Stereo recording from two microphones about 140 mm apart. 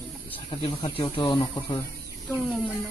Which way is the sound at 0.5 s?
40° left (ahead or behind).